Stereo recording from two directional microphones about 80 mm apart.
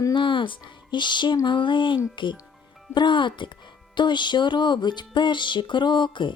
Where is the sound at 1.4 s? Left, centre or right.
Left.